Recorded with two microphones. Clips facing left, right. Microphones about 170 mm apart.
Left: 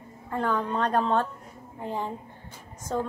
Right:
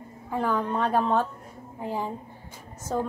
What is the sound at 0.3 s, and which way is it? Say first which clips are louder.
A woman's voice: right 1 dB; 5° right (ahead or behind).